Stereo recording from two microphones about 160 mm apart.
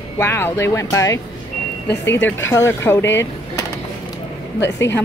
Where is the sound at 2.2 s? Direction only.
15° left (ahead or behind).